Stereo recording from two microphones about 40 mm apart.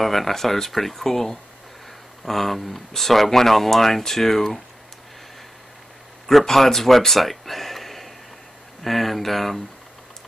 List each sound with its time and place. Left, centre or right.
0.0 s speech: centre
6.2 s speech: centre